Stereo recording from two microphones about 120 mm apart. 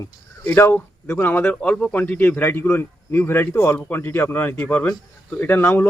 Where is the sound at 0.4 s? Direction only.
20° left (ahead or behind).